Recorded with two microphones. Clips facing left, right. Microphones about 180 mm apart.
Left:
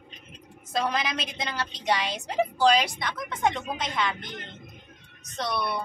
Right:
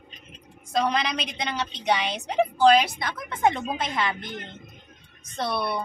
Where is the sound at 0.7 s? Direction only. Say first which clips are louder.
Right 3 dB; 5° left (ahead or behind).